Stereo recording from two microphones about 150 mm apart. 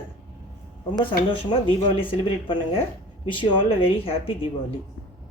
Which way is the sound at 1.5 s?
35° left (ahead or behind).